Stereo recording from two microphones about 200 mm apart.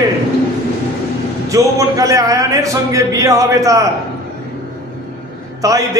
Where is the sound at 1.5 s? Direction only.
15° right (ahead or behind).